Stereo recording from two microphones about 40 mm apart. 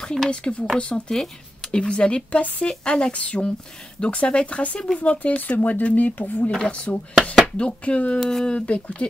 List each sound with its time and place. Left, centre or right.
0.0 s speech: centre
0.3 s speech: left
6.5 s speech: left
7.8 s speech: left
8.2 s speech: centre
8.5 s speech: left